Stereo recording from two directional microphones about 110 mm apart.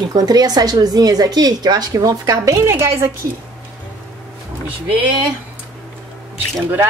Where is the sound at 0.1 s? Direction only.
35° right (ahead or behind); by 3.1 s 20° right (ahead or behind).